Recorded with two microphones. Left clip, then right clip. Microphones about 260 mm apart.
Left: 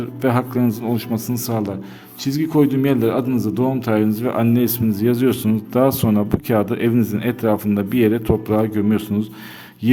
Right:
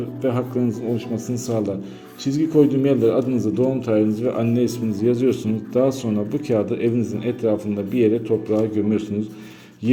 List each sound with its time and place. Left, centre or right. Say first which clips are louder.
0.2 s speech: left 3 dB; left